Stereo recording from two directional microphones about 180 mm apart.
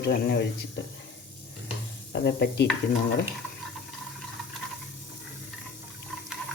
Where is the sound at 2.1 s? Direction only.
65° left (ahead or behind).